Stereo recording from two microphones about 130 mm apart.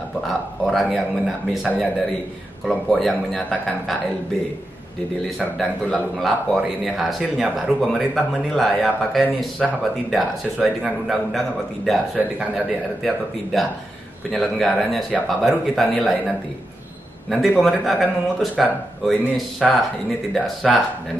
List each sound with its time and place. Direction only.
0.3 s speech: centre (ahead or behind)
5.6 s speech: centre (ahead or behind)
13.0 s speech: centre (ahead or behind)